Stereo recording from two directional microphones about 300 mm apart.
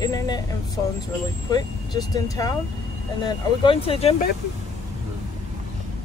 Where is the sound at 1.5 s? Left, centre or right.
Centre.